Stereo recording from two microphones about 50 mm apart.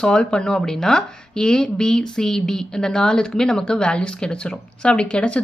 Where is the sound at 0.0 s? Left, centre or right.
Centre.